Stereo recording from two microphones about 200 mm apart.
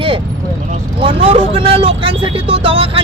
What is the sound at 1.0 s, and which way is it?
Speech, 30° right (ahead or behind).